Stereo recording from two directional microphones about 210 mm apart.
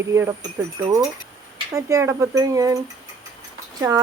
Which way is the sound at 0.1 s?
15° right (ahead or behind).